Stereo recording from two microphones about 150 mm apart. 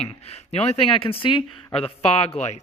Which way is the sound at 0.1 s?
45° left (ahead or behind).